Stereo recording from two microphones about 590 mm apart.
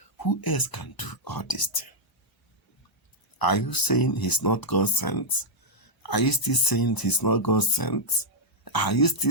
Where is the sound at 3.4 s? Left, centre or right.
Left.